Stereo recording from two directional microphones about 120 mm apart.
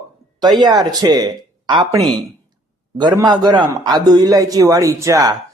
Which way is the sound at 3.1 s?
35° right (ahead or behind).